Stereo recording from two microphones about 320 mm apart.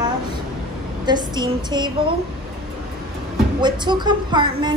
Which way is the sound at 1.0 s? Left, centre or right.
Centre.